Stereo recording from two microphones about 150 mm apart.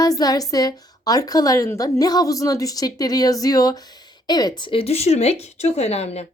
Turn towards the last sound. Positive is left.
turn(degrees=45)  # may be behind; listen again after turning